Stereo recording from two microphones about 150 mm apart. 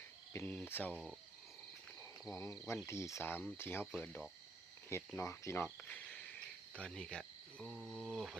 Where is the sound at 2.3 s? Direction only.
20° left (ahead or behind).